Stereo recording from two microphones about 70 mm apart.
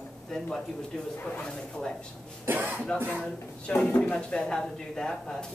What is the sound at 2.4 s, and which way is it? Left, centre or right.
Speech, right.